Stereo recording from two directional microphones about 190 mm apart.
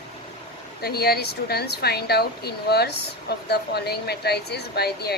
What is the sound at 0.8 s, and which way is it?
A woman's voice, 55° left (ahead or behind).